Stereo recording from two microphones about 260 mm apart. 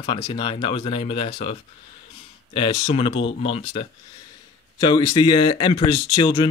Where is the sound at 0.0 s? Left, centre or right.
Centre.